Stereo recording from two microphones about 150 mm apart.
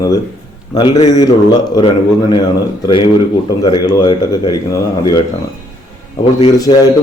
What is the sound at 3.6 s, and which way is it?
Speech, 25° left (ahead or behind).